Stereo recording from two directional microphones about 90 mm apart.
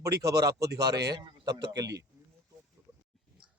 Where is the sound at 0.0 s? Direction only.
40° right (ahead or behind).